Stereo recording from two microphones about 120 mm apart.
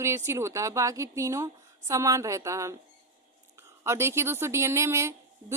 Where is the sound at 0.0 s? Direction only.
25° right (ahead or behind).